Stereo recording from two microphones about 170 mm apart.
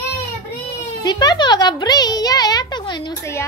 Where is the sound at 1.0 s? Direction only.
25° left (ahead or behind).